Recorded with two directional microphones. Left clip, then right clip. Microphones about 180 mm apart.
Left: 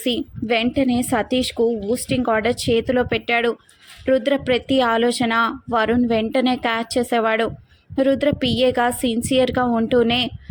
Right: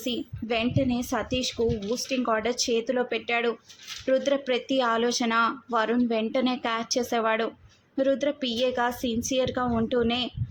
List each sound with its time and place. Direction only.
0.0 s speech: 30° left (ahead or behind)